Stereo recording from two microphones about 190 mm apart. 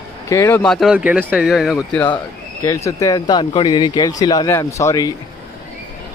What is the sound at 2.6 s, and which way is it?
Speech, 15° left (ahead or behind).